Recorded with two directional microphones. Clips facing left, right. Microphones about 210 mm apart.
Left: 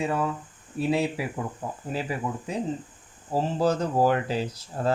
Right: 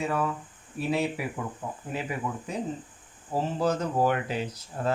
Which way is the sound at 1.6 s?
40° left (ahead or behind).